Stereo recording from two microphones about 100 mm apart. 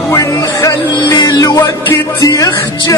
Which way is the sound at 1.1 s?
40° left (ahead or behind).